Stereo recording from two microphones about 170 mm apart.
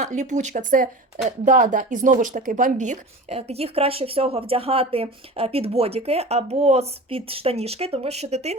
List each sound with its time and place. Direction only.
0.0 s speech: 45° right (ahead or behind)